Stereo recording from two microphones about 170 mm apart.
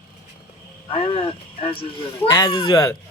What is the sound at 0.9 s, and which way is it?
A man's voice, 30° left (ahead or behind).